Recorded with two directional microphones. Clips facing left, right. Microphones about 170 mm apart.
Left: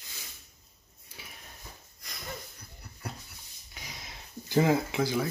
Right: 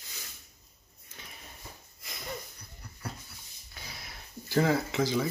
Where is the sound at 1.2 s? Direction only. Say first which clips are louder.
Left 1 dB; 10° left (ahead or behind).